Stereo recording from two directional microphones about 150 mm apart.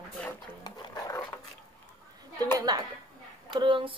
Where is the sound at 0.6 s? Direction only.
25° left (ahead or behind).